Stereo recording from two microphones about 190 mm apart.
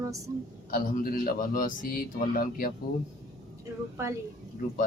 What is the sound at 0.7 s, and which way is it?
Speech, 50° left (ahead or behind).